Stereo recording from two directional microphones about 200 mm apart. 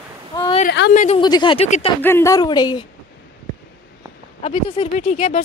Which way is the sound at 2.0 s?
15° left (ahead or behind).